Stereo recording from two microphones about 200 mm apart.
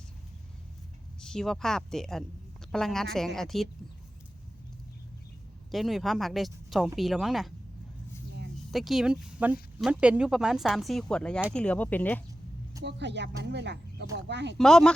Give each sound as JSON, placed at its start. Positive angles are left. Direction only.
{"t": 1.2, "sound": "speech", "side_deg": 0}
{"t": 5.7, "sound": "speech", "side_deg": 0}
{"t": 8.7, "sound": "speech", "side_deg": 0}
{"t": 12.8, "sound": "speech", "side_deg": -60}
{"t": 14.6, "sound": "speech", "side_deg": 5}